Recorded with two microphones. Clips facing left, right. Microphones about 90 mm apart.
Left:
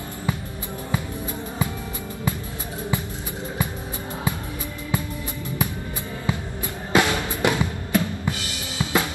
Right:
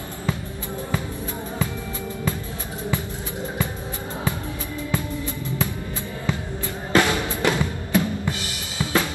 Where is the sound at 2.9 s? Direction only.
20° left (ahead or behind).